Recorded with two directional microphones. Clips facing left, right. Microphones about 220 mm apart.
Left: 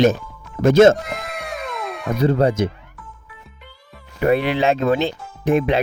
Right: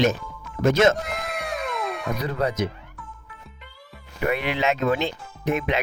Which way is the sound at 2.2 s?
30° left (ahead or behind).